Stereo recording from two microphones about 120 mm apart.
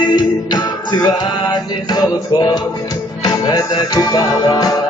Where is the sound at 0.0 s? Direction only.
40° left (ahead or behind).